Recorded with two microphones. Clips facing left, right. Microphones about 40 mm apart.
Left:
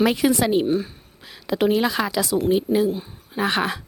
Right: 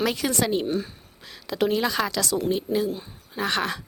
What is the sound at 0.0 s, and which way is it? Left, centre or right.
A woman's voice, centre.